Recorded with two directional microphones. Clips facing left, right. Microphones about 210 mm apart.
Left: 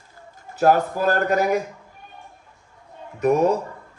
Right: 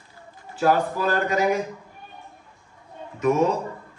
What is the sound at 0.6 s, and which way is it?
Speech, 45° left (ahead or behind).